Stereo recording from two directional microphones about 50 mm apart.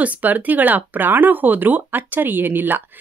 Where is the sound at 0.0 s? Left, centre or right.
Right.